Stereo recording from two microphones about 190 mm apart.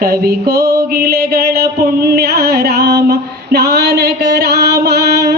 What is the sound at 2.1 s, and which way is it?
Music, 55° right (ahead or behind).